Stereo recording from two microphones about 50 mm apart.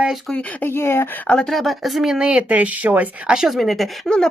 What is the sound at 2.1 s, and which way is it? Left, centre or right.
Speech, centre.